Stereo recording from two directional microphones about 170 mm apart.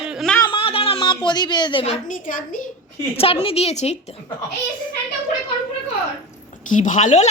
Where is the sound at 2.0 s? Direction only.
50° left (ahead or behind).